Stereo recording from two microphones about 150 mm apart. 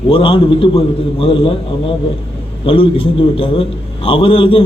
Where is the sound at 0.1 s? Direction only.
35° left (ahead or behind).